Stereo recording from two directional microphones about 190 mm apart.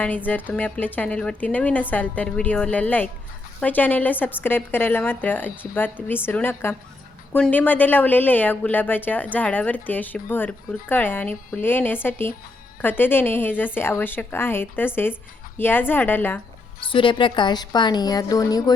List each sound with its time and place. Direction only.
0.3 s a woman's voice: 10° left (ahead or behind)
16.9 s a woman's voice: 25° left (ahead or behind)